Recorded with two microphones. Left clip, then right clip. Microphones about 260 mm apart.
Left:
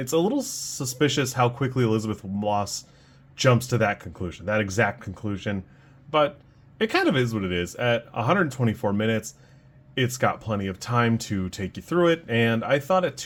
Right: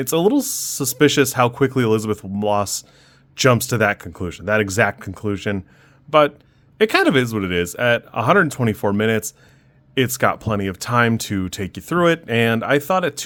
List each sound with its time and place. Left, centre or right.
0.0 s speech: right